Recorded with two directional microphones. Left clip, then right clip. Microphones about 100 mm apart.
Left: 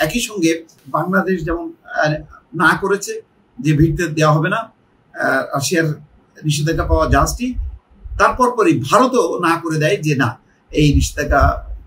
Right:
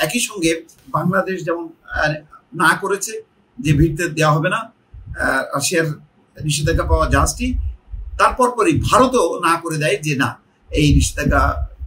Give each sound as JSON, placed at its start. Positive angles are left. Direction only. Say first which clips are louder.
{"t": 0.0, "sound": "speech", "louder": "left 2 dB", "side_deg": -15}